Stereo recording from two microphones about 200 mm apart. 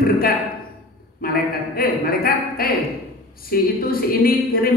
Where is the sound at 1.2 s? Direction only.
50° left (ahead or behind).